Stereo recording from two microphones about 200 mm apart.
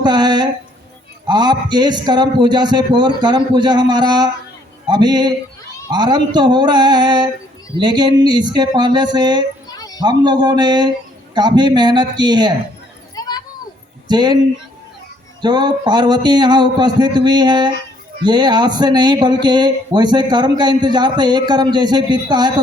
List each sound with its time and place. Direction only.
0.0 s speech: 20° right (ahead or behind)
9.7 s a sound: 20° left (ahead or behind)
10.0 s speech: 20° right (ahead or behind)
13.2 s children playing: 20° left (ahead or behind)
14.1 s speech: 20° right (ahead or behind)
15.4 s speech: 20° right (ahead or behind)